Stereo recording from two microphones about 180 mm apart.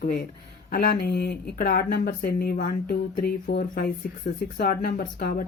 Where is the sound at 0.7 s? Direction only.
55° left (ahead or behind).